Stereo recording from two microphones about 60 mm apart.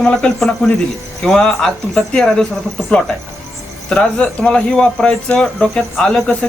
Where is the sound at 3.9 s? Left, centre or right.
Centre.